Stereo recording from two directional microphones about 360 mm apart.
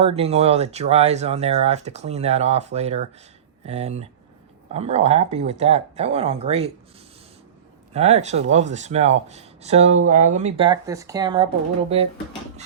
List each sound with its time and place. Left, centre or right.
0.0 s speech: centre
7.9 s speech: centre